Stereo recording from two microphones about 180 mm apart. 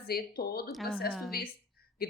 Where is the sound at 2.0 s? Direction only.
55° left (ahead or behind).